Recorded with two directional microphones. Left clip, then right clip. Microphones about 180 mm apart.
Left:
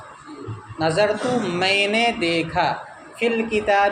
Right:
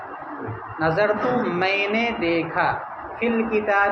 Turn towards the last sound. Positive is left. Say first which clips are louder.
# left 1 dB
turn(degrees=60)  # may be behind; listen again after turning